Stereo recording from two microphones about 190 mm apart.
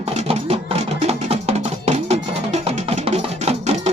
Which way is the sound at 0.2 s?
35° right (ahead or behind).